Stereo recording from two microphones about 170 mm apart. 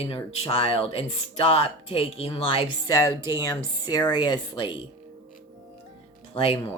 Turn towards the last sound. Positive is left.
turn(degrees=35)  # may be behind; listen again after turning